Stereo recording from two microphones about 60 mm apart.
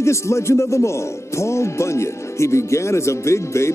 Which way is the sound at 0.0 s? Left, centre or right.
Left.